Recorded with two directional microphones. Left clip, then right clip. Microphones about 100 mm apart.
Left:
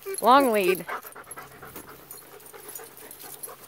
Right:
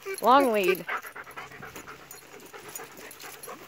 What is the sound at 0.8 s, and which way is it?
Dog, 65° left (ahead or behind).